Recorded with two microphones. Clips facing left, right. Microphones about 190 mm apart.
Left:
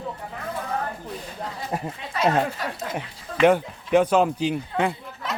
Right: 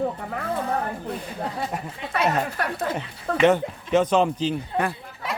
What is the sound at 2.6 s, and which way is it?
Speech, 60° right (ahead or behind).